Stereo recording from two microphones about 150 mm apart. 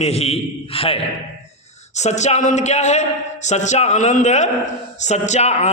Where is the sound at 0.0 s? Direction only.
45° left (ahead or behind).